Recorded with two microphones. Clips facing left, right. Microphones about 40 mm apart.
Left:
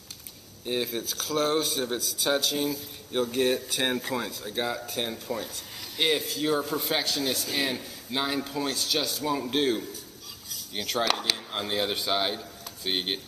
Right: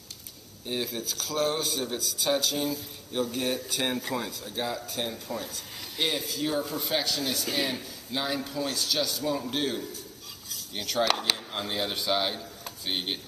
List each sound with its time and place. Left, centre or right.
0.9 s a man's voice: centre
8.6 s speech: left
8.9 s a man's voice: centre
10.5 s cutlery: centre
11.0 s a man's voice: centre